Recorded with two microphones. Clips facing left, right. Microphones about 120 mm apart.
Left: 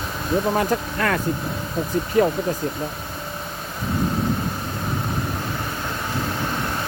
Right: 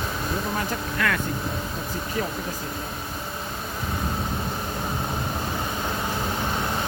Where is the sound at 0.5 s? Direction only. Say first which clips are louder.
Left 6 dB; 40° left (ahead or behind).